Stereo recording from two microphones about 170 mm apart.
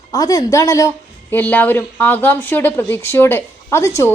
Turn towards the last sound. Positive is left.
turn(degrees=15)  # may be behind; listen again after turning